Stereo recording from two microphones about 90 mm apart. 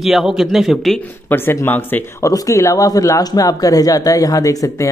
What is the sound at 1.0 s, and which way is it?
Speech, 25° left (ahead or behind).